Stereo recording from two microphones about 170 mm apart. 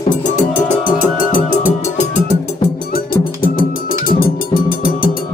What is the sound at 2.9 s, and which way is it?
Cowbell, 60° left (ahead or behind).